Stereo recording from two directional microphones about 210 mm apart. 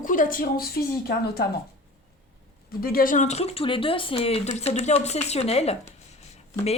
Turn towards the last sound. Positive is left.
turn(degrees=30)  # may be behind; listen again after turning